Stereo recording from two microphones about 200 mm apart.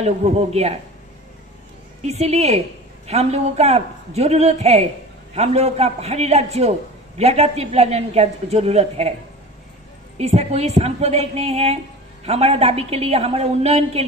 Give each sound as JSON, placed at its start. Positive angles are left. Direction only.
{"t": 0.0, "sound": "a man's voice", "side_deg": -30}
{"t": 2.0, "sound": "a man's voice", "side_deg": -30}
{"t": 10.1, "sound": "a man's voice", "side_deg": -30}